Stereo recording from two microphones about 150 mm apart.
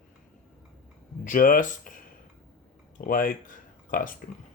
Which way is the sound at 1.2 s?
65° left (ahead or behind).